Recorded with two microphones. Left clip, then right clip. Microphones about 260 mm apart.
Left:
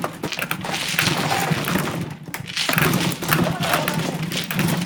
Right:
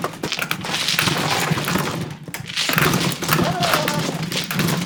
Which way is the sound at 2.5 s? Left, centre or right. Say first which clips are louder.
Right 1 dB; centre.